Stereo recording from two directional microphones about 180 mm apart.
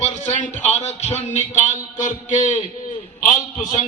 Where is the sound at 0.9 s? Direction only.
40° left (ahead or behind).